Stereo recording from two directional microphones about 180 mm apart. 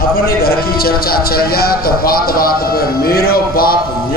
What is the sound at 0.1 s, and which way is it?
A man's voice, 55° left (ahead or behind).